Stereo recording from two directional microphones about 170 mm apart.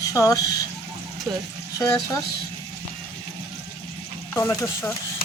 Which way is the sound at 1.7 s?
20° left (ahead or behind).